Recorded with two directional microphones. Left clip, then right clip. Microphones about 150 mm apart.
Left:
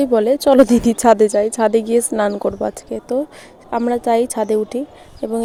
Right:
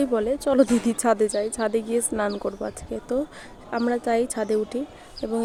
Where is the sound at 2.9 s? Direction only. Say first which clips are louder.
Left 6 dB; 25° left (ahead or behind).